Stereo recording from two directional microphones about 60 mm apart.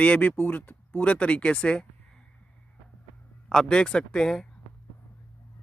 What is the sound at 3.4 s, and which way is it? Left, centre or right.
Speech, centre.